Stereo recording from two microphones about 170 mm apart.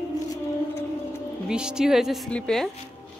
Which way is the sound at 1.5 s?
5° right (ahead or behind).